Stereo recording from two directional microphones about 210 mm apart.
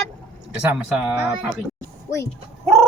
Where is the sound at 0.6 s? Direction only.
5° right (ahead or behind).